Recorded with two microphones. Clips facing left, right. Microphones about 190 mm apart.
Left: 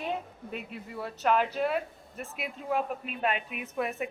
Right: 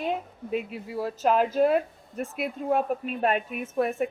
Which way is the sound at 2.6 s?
45° right (ahead or behind).